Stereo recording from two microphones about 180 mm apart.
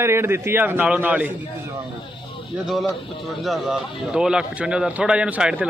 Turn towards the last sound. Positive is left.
turn(degrees=-5)  # may be behind; listen again after turning